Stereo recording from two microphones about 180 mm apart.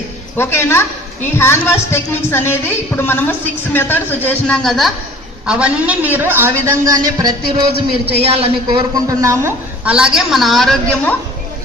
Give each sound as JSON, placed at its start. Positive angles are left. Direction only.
{"t": 0.3, "sound": "a woman's voice", "side_deg": 15}
{"t": 7.4, "sound": "speech", "side_deg": -65}
{"t": 8.2, "sound": "a woman's voice", "side_deg": -35}
{"t": 9.0, "sound": "a woman's voice", "side_deg": -15}